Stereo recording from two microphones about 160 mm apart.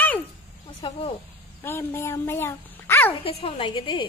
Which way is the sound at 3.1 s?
35° left (ahead or behind).